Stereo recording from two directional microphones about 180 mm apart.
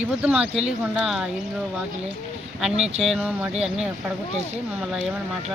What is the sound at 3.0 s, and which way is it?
Speech, 5° right (ahead or behind).